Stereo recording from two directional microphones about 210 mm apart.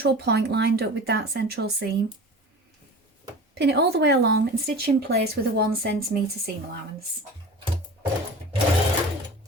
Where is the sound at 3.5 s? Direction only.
50° right (ahead or behind).